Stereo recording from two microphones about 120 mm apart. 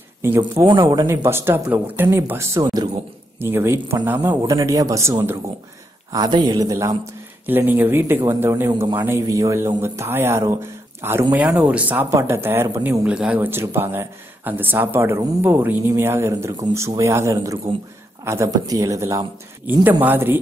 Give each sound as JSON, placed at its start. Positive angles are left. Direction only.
{"t": 0.4, "sound": "speech", "side_deg": -40}
{"t": 3.3, "sound": "speech", "side_deg": -20}
{"t": 4.4, "sound": "speech", "side_deg": -30}
{"t": 6.1, "sound": "speech", "side_deg": -35}
{"t": 7.4, "sound": "speech", "side_deg": -15}
{"t": 13.0, "sound": "speech", "side_deg": -10}